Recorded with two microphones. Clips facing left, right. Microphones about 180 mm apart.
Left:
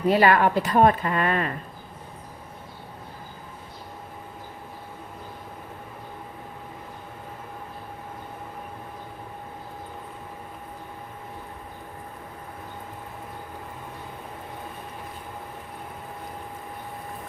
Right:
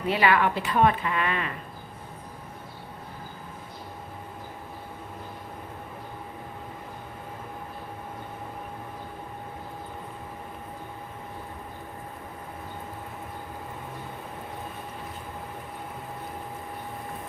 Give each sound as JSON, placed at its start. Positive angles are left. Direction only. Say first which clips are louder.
{"t": 0.1, "sound": "a woman's voice", "louder": "left 4 dB", "side_deg": 40}